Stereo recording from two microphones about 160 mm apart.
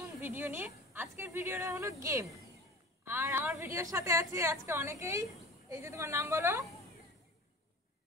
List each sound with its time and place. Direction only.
0.2 s a woman's voice: 15° right (ahead or behind)